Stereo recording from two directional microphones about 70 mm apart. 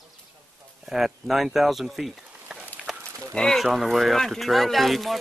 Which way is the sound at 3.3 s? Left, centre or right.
Centre.